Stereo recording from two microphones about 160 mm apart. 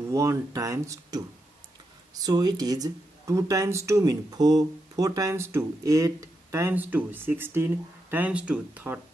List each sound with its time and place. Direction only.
0.1 s speech: 20° right (ahead or behind)
2.2 s speech: 25° right (ahead or behind)